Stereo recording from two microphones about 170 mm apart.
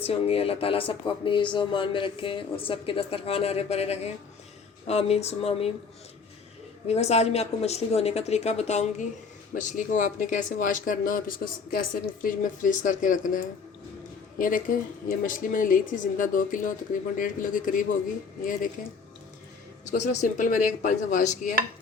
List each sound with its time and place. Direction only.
0.0 s speech: 35° left (ahead or behind)
6.8 s speech: 40° left (ahead or behind)
19.9 s speech: 50° left (ahead or behind)